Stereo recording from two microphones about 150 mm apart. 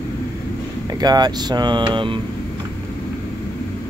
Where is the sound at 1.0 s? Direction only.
25° right (ahead or behind).